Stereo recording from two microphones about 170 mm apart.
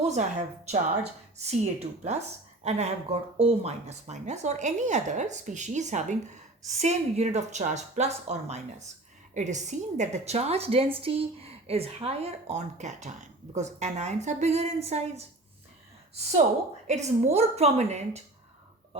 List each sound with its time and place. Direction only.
0.0 s a woman's voice: 45° right (ahead or behind)
16.8 s a woman's voice: 40° right (ahead or behind)